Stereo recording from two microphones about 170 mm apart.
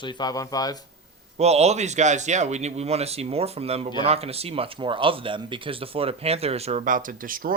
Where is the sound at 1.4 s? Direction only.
40° right (ahead or behind).